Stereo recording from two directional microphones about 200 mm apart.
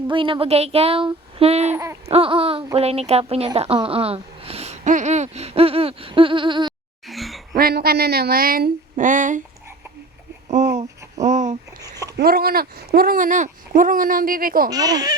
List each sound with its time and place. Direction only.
0.1 s speech: 25° right (ahead or behind)
1.7 s a sound: 15° right (ahead or behind)
2.0 s speech: 30° right (ahead or behind)
7.1 s a sound: centre (ahead or behind)
7.5 s speech: 50° right (ahead or behind)
10.5 s a sound: 35° right (ahead or behind)
11.8 s speech: 15° right (ahead or behind)
12.1 s speech: 50° right (ahead or behind)
14.7 s speech: 20° right (ahead or behind)